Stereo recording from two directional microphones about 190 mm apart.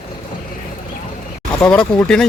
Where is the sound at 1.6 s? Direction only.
5° left (ahead or behind).